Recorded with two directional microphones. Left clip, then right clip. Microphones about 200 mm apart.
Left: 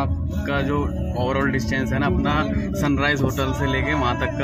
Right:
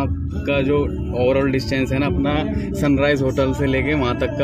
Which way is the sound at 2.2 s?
20° right (ahead or behind).